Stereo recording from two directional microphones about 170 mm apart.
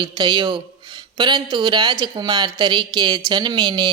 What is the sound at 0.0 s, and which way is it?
Speech, 25° right (ahead or behind).